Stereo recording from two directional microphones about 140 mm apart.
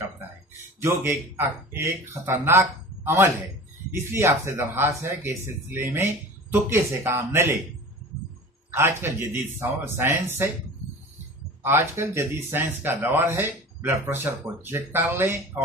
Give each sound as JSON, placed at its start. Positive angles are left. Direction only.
{"t": 0.7, "sound": "speech", "side_deg": -20}
{"t": 8.7, "sound": "speech", "side_deg": -15}
{"t": 11.6, "sound": "speech", "side_deg": -15}